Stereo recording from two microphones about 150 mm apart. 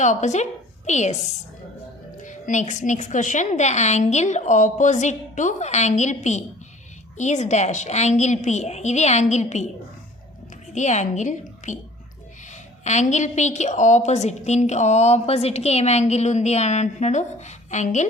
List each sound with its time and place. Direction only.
0.0 s a woman's voice: 55° left (ahead or behind)
2.2 s a woman's voice: 55° left (ahead or behind)
10.8 s a woman's voice: 50° left (ahead or behind)